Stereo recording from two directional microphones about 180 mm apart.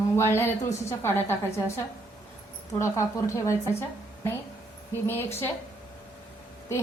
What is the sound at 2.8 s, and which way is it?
A woman's voice, 15° left (ahead or behind).